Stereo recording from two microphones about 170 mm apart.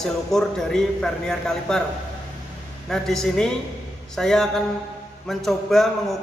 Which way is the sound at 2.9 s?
Centre (ahead or behind).